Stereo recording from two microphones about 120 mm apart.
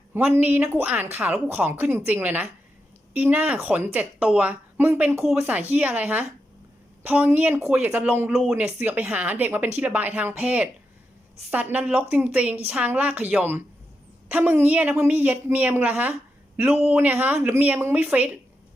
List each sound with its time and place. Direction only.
0.1 s speech: 15° right (ahead or behind)
8.3 s speech: centre (ahead or behind)
8.5 s speech: 15° right (ahead or behind)